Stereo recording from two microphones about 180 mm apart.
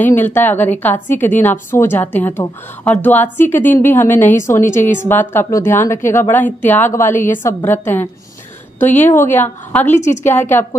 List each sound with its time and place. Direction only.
0.0 s a woman's voice: 10° left (ahead or behind)
7.1 s a woman's voice: 45° left (ahead or behind)
7.4 s a woman's voice: 15° left (ahead or behind)
9.9 s a woman's voice: 40° left (ahead or behind)
10.2 s a woman's voice: 15° left (ahead or behind)